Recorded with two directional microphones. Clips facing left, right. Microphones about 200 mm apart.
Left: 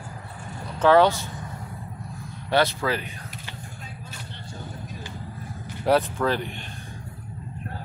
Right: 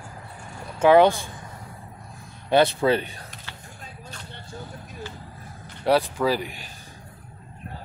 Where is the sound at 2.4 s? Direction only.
20° right (ahead or behind).